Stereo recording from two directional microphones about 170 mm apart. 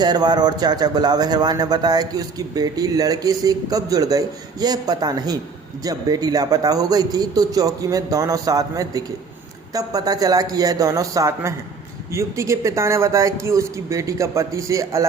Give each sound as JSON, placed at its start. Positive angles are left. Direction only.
{"t": 0.0, "sound": "speech", "side_deg": -25}